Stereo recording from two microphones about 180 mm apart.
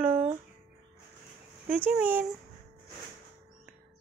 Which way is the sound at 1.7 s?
10° right (ahead or behind).